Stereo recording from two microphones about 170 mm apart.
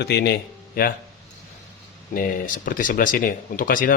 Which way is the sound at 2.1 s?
55° left (ahead or behind).